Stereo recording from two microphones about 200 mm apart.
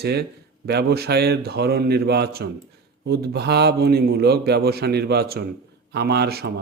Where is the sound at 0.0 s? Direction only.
55° right (ahead or behind).